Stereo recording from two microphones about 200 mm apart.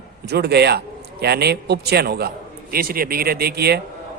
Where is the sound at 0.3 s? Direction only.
55° right (ahead or behind).